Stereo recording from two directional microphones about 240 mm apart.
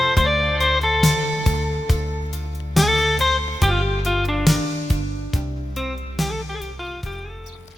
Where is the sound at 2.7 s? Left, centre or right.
Centre.